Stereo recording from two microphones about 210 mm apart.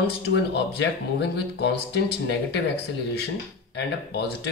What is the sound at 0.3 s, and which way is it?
Speech, 55° left (ahead or behind).